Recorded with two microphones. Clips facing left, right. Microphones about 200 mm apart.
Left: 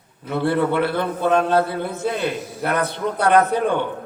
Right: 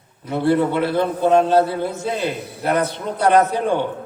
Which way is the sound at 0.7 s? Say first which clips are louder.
Right 2 dB; 60° left (ahead or behind).